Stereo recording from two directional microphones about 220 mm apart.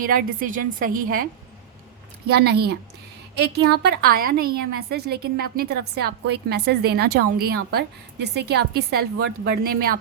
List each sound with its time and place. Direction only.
0.0 s a woman's voice: 40° right (ahead or behind)
2.3 s a woman's voice: 45° right (ahead or behind)